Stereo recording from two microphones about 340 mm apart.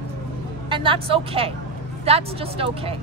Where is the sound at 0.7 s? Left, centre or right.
Centre.